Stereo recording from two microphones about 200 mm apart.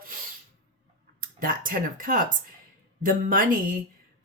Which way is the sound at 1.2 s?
45° right (ahead or behind).